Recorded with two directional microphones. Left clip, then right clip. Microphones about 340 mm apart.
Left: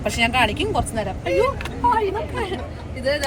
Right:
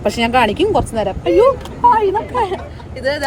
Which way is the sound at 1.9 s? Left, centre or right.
Centre.